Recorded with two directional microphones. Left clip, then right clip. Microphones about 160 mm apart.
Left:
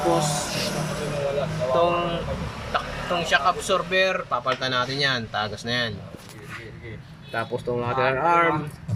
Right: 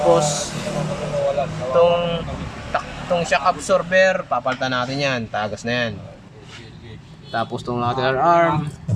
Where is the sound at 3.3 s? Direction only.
5° right (ahead or behind).